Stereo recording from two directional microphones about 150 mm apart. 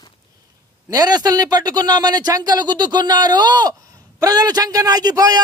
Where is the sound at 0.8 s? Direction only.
25° right (ahead or behind).